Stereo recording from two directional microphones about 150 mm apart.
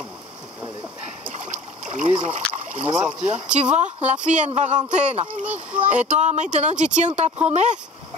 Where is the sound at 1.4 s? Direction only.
55° right (ahead or behind).